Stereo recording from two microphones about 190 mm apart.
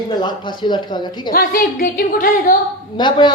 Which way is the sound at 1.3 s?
50° left (ahead or behind).